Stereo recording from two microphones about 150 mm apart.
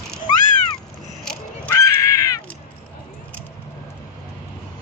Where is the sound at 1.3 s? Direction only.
15° left (ahead or behind).